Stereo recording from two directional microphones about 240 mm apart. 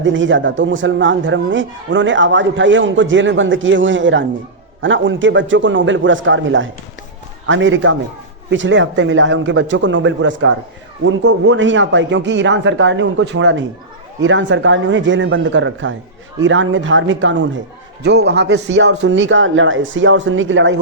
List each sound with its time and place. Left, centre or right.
0.0 s a man's voice: right